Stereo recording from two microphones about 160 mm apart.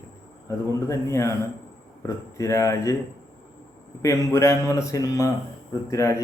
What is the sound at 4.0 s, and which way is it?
A man's voice, 20° left (ahead or behind).